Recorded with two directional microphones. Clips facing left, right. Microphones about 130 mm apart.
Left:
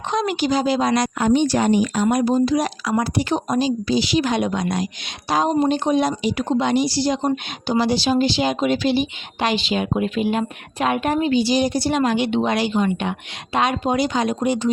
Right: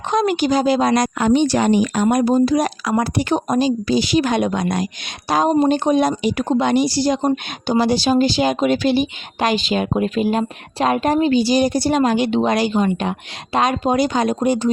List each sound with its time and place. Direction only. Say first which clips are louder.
0.1 s speech: right 3 dB; 50° right (ahead or behind)
1.2 s speech: right 1 dB; 90° right
2.0 s speech: right 3 dB; 50° right (ahead or behind)